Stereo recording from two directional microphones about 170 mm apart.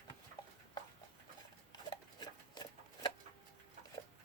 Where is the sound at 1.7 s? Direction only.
25° left (ahead or behind).